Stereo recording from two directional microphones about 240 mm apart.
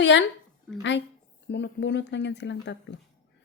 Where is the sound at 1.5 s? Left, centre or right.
Left.